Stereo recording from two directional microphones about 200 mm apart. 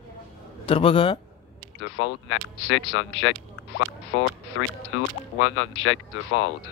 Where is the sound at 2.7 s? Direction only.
75° left (ahead or behind).